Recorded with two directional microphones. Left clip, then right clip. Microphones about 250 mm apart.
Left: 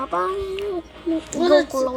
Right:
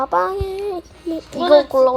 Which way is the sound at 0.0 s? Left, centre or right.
Centre.